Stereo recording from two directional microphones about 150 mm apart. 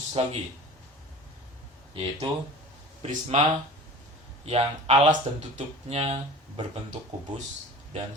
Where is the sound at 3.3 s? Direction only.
50° right (ahead or behind).